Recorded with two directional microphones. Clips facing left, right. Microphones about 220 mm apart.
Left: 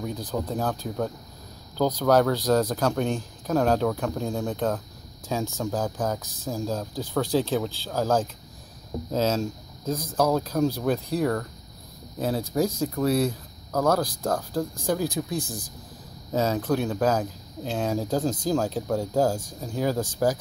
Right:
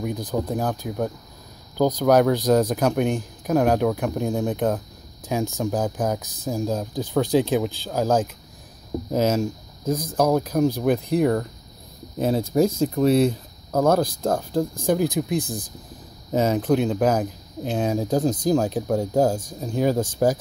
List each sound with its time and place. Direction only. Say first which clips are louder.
0.0 s speech: right 4 dB; 15° right (ahead or behind)